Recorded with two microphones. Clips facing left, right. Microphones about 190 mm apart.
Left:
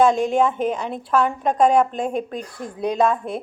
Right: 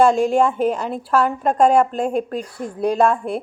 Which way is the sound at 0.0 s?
10° right (ahead or behind).